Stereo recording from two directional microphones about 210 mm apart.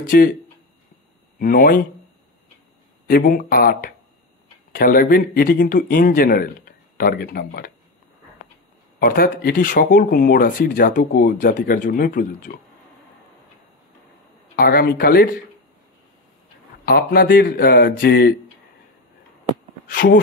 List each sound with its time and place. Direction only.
0.0 s speech: 40° left (ahead or behind)
1.4 s speech: 40° left (ahead or behind)
3.1 s speech: 45° left (ahead or behind)
9.0 s speech: 45° left (ahead or behind)
14.5 s speech: 45° left (ahead or behind)
16.8 s speech: 45° left (ahead or behind)
19.9 s speech: 40° left (ahead or behind)